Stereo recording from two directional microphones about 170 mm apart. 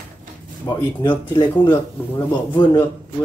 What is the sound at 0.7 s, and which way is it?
A man's voice, 15° left (ahead or behind).